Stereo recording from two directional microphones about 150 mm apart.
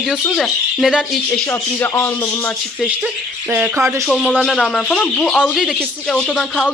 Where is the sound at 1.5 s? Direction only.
15° left (ahead or behind).